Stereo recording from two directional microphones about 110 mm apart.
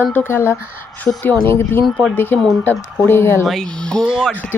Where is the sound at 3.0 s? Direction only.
20° left (ahead or behind).